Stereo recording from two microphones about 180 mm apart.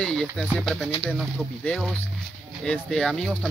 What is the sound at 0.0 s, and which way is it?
Speech, 5° left (ahead or behind).